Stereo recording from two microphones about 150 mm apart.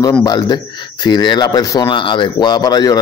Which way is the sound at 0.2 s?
30° left (ahead or behind).